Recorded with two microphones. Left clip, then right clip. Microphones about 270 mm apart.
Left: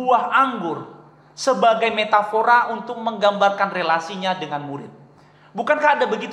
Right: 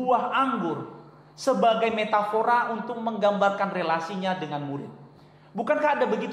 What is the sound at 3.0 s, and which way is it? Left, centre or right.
A man's voice, left.